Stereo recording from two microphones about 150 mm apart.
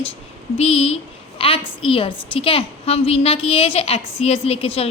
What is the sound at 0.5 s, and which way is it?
A woman's voice, 40° left (ahead or behind).